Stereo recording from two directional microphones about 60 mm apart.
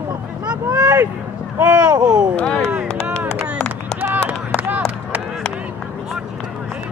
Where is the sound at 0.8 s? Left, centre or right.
Right.